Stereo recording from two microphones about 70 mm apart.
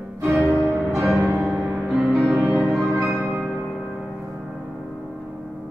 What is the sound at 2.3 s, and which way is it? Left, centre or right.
Music, centre.